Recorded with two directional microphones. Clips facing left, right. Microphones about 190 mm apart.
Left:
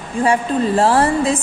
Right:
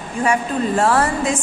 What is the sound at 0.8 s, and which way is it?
Speech, 30° left (ahead or behind).